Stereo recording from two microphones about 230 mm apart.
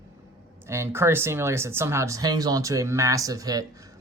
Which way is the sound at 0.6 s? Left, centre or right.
Centre.